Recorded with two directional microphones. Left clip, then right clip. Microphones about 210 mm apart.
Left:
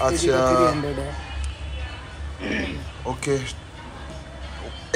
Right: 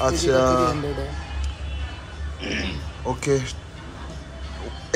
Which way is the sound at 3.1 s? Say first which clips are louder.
Right 2 dB; 20° right (ahead or behind).